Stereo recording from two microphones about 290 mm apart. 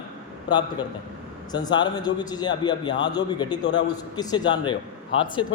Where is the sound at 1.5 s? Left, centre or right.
Centre.